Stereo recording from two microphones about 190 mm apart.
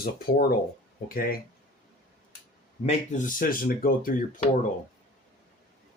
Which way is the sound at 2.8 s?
45° left (ahead or behind).